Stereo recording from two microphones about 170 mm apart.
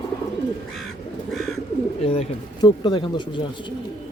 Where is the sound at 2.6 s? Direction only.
25° left (ahead or behind).